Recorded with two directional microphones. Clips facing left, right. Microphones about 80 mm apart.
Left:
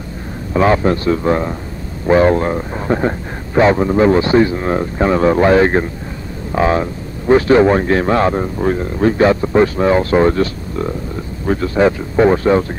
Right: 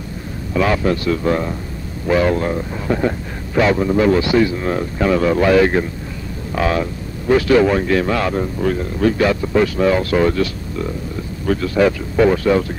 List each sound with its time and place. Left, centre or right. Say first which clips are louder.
0.5 s speech: left 4 dB; left